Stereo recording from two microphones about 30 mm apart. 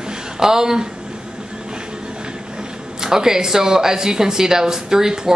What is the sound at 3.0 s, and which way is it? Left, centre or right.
Speech, right.